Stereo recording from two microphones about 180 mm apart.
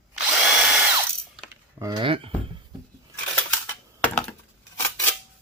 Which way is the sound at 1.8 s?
30° right (ahead or behind).